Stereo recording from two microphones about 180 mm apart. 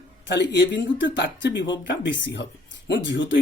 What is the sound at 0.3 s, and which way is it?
Speech, 85° left.